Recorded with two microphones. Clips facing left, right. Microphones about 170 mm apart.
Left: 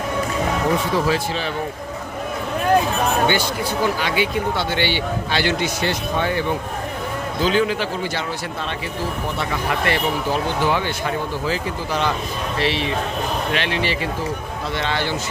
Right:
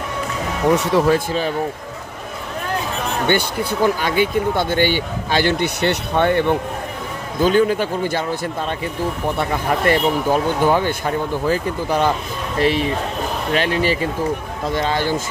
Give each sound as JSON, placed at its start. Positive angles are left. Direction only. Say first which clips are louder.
{"t": 0.9, "sound": "speech", "louder": "right 4 dB", "side_deg": -55}
{"t": 3.2, "sound": "speech", "louder": "right 2 dB", "side_deg": -55}
{"t": 7.4, "sound": "speech", "louder": "right 4 dB", "side_deg": -50}
{"t": 9.4, "sound": "speech", "louder": "right 4 dB", "side_deg": -45}